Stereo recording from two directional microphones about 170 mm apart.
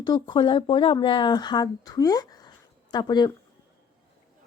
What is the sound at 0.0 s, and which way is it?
Speech, 25° left (ahead or behind).